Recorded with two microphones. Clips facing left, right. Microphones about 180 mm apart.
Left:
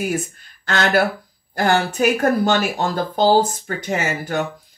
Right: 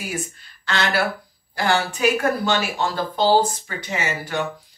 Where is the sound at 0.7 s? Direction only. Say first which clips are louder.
Left 4 dB; 45° left (ahead or behind).